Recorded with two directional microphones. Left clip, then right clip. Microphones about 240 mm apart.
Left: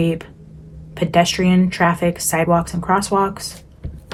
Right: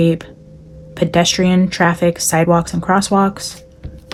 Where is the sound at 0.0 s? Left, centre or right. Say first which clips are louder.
Right 5 dB; right.